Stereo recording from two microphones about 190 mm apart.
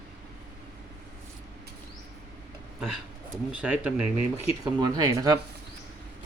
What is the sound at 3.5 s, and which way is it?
Speech, 5° right (ahead or behind).